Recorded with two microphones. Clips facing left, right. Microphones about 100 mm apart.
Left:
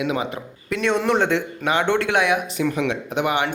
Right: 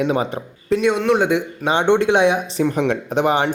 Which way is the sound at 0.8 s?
5° right (ahead or behind).